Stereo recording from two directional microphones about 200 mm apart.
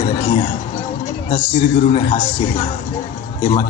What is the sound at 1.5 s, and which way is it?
Speech, 30° left (ahead or behind).